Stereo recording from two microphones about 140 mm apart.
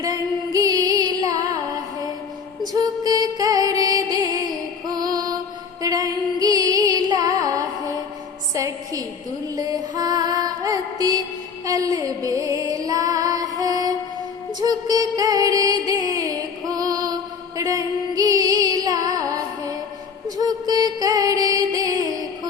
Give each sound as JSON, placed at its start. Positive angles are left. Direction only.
{"t": 0.0, "sound": "music", "side_deg": -25}
{"t": 2.7, "sound": "music", "side_deg": -25}
{"t": 8.5, "sound": "a sound", "side_deg": -25}
{"t": 9.6, "sound": "music", "side_deg": -25}